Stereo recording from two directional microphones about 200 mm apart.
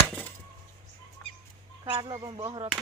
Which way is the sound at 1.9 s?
25° right (ahead or behind).